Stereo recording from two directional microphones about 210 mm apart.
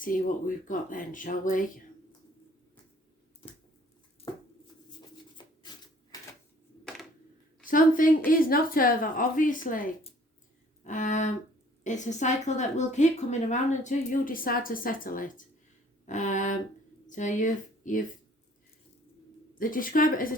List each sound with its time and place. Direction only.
0.0 s a woman's voice: 40° left (ahead or behind)
3.4 s a sound: 30° left (ahead or behind)
5.6 s typewriter: 20° left (ahead or behind)
7.6 s a woman's voice: 40° left (ahead or behind)
10.8 s a woman's voice: 35° left (ahead or behind)
19.5 s a woman's voice: 40° left (ahead or behind)